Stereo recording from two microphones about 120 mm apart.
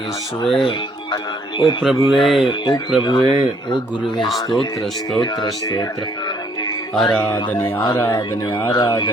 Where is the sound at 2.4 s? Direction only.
45° left (ahead or behind).